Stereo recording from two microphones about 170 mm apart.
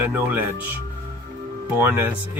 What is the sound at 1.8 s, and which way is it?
Speech, 15° right (ahead or behind).